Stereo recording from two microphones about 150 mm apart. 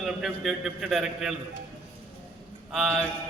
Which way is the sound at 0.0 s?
Centre (ahead or behind).